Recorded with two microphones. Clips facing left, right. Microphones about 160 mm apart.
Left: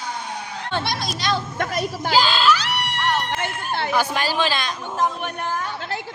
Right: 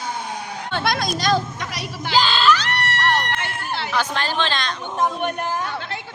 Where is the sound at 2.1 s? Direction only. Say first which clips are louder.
Right 1 dB; 5° left (ahead or behind).